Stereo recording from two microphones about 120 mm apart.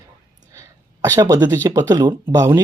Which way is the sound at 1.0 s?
30° right (ahead or behind).